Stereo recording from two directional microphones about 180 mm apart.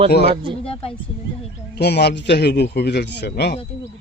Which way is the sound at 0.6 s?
30° left (ahead or behind).